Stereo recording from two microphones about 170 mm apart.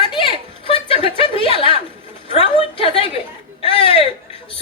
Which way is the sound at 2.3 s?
35° left (ahead or behind).